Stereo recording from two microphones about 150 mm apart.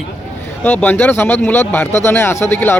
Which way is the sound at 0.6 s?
15° left (ahead or behind).